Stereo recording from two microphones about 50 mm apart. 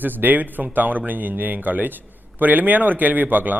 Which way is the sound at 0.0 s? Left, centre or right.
Right.